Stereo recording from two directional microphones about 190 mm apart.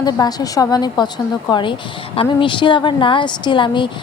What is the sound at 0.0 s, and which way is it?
A woman's voice, 20° left (ahead or behind).